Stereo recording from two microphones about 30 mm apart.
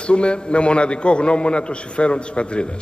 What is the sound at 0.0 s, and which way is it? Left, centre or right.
A man's voice, left.